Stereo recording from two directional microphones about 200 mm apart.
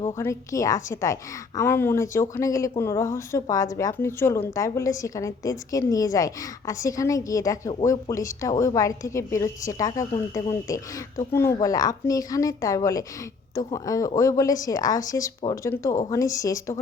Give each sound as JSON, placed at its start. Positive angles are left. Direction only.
{"t": 0.2, "sound": "a woman's voice", "side_deg": 15}
{"t": 8.1, "sound": "a woman's voice", "side_deg": 15}